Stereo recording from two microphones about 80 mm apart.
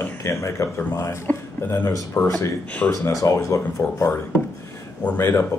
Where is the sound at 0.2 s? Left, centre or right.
Left.